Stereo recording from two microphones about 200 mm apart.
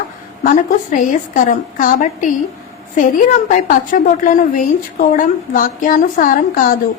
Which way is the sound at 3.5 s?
40° left (ahead or behind).